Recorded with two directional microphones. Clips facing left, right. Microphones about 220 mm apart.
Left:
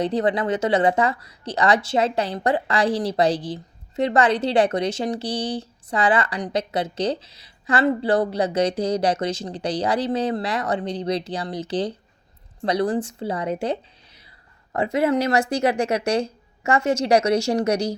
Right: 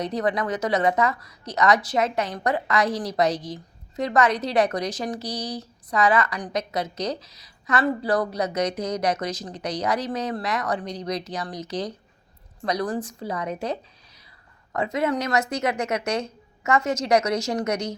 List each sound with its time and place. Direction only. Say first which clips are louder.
0.0 s speech: left 4 dB; 30° left (ahead or behind)